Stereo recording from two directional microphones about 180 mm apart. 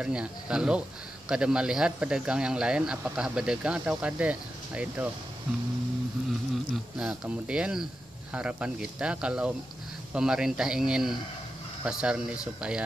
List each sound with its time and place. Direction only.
0.0 s speech: 5° right (ahead or behind)
6.5 s speech: 5° right (ahead or behind)